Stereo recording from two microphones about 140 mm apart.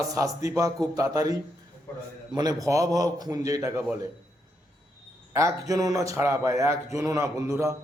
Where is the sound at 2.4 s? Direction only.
25° right (ahead or behind).